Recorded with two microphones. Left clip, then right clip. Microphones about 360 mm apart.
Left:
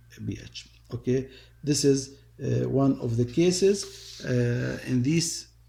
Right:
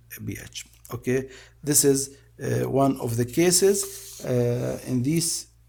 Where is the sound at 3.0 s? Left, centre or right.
Right.